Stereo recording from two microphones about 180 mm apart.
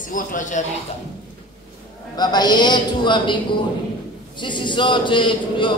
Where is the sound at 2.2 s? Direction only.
20° left (ahead or behind).